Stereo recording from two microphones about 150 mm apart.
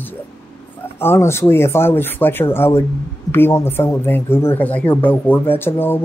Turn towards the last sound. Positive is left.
turn(degrees=15)  # may be behind; listen again after turning